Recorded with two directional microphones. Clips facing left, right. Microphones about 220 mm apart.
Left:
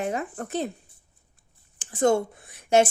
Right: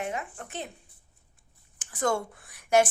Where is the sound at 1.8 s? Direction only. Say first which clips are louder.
Left 7 dB; 25° left (ahead or behind).